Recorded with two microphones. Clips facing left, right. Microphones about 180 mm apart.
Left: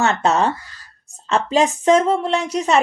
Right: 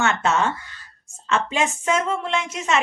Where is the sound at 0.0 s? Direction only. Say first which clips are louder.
Left 4 dB; 35° left (ahead or behind).